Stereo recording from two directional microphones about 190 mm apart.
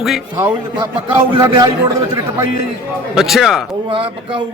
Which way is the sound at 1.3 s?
20° right (ahead or behind).